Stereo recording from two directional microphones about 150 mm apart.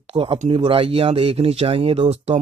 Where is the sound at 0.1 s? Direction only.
35° right (ahead or behind).